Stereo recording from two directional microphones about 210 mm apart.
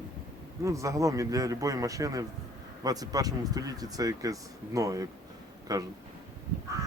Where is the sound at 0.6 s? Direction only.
15° right (ahead or behind).